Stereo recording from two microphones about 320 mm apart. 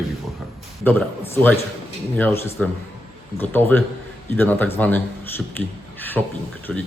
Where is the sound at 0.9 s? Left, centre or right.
Centre.